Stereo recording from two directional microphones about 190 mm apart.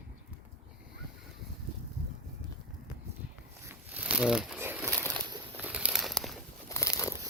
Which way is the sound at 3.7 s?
5° right (ahead or behind).